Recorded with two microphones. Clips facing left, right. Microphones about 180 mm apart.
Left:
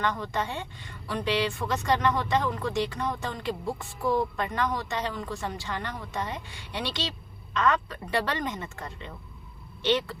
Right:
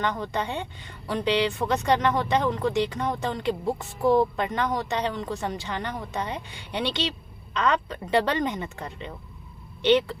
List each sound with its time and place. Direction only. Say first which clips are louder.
0.0 s speech: right 2 dB; 20° right (ahead or behind)